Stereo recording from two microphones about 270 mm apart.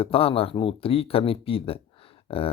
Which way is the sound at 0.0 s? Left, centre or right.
Left.